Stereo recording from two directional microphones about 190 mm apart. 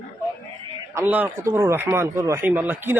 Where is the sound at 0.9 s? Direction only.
10° right (ahead or behind).